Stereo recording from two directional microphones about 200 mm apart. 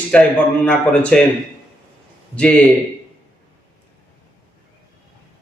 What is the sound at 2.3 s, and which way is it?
Speech, 5° left (ahead or behind).